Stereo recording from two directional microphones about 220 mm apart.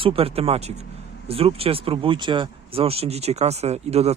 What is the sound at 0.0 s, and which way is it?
Speech, 25° right (ahead or behind).